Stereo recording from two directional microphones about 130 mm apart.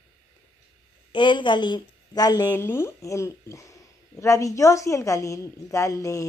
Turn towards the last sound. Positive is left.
turn(degrees=25)  # may be behind; listen again after turning